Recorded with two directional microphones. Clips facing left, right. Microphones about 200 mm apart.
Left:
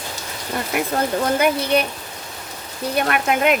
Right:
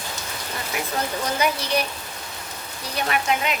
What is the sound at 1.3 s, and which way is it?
Speech, 55° left (ahead or behind).